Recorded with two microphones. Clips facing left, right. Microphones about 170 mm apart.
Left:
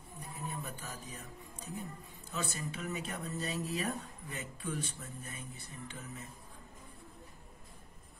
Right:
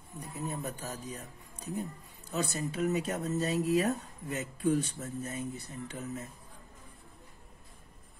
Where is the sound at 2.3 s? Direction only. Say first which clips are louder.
Right 6 dB; 40° right (ahead or behind).